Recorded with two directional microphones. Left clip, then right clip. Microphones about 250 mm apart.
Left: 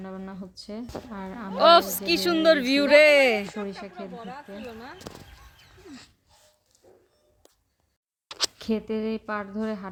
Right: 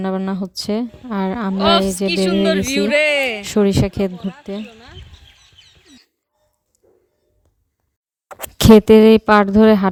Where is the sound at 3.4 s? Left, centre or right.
Right.